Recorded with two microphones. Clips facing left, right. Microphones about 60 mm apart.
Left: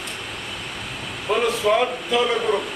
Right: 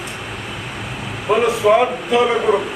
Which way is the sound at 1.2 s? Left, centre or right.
Centre.